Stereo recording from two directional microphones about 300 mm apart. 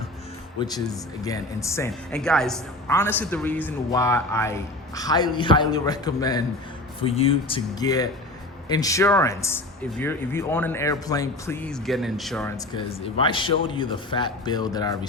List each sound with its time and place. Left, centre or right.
1.2 s a woman's voice: centre
12.5 s a woman's voice: centre